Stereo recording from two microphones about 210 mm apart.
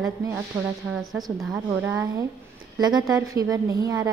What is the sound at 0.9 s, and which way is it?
A woman's voice, centre (ahead or behind).